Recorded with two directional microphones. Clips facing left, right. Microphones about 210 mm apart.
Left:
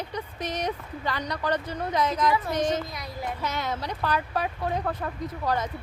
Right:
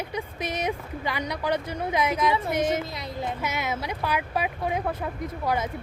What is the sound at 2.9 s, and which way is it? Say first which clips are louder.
Speech: right 2 dB; 25° right (ahead or behind).